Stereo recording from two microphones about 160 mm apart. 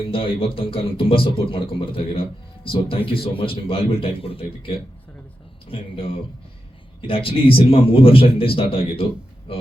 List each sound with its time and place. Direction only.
0.0 s speech: 35° left (ahead or behind)